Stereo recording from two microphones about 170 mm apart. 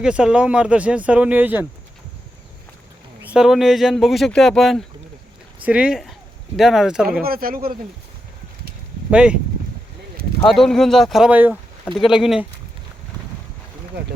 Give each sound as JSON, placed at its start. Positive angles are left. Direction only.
{"t": 0.0, "sound": "speech", "side_deg": -5}
{"t": 3.2, "sound": "speech", "side_deg": -5}
{"t": 7.2, "sound": "speech", "side_deg": -60}
{"t": 9.0, "sound": "speech", "side_deg": -5}
{"t": 10.4, "sound": "speech", "side_deg": 0}